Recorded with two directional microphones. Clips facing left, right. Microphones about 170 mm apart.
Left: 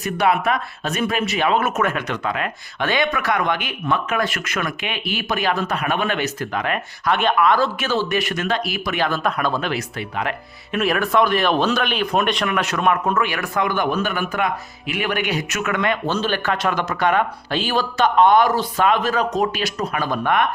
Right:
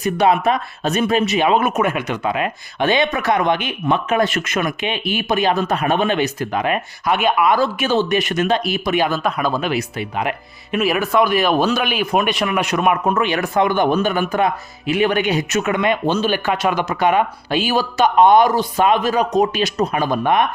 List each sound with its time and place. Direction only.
0.0 s speech: 25° right (ahead or behind)
9.0 s speech: 5° right (ahead or behind)
10.8 s speech: 5° right (ahead or behind)